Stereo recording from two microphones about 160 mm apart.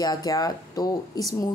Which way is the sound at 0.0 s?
25° left (ahead or behind).